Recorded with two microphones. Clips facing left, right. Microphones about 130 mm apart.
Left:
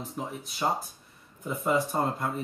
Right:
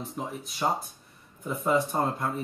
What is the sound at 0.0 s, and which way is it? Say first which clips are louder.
Speech: right 1 dB; centre (ahead or behind).